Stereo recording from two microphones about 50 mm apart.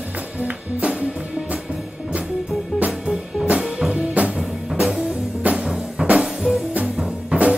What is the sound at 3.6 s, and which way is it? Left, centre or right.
Music, centre.